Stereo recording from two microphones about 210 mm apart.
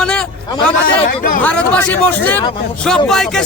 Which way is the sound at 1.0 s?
40° left (ahead or behind).